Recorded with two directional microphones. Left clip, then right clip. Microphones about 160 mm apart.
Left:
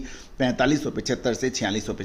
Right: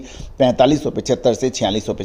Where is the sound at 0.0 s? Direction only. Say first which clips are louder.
Right 10 dB; 35° right (ahead or behind).